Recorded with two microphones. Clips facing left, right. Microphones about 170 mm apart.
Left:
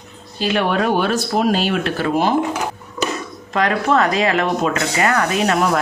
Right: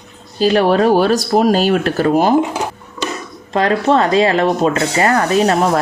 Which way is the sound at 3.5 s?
30° right (ahead or behind).